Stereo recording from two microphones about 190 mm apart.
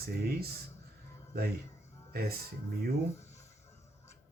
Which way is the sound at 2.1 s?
50° right (ahead or behind).